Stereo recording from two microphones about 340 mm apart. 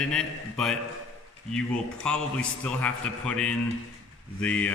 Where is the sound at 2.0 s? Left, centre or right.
Centre.